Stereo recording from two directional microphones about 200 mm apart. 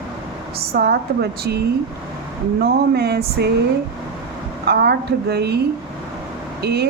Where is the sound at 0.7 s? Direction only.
50° right (ahead or behind).